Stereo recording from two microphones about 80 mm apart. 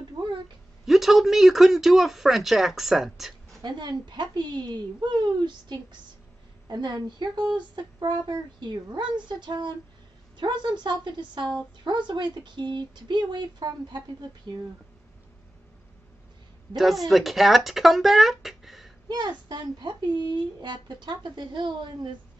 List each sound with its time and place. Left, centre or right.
0.8 s speech: centre
3.6 s a woman's voice: right
16.7 s speech: centre
19.0 s a child's voice: right